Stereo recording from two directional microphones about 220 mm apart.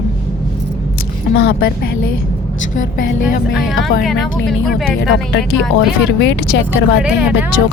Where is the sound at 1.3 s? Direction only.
50° left (ahead or behind).